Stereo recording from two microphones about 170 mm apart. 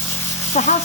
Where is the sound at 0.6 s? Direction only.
40° left (ahead or behind).